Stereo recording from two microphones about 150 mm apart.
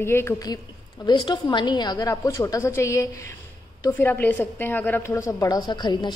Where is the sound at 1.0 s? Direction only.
30° left (ahead or behind).